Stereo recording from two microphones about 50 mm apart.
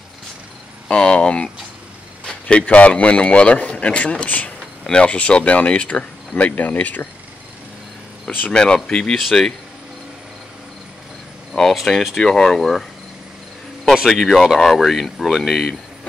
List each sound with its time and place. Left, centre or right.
0.8 s speech: centre
6.3 s speech: left
8.5 s speech: centre
11.5 s speech: centre
12.2 s speech: centre
14.0 s speech: centre